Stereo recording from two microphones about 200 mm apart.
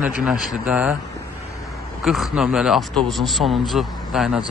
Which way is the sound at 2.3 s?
Centre (ahead or behind).